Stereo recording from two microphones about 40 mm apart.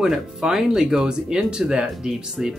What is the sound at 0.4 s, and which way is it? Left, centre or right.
Speech, centre.